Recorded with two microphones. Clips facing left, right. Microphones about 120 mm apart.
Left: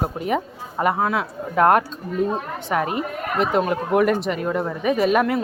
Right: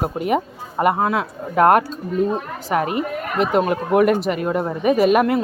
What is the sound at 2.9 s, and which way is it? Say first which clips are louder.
A woman's voice: right 2 dB; centre (ahead or behind).